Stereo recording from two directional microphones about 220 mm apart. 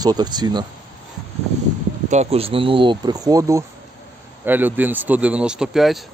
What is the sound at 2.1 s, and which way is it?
Speech, 30° right (ahead or behind).